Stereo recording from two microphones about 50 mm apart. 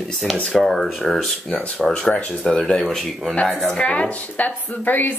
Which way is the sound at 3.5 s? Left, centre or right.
Centre.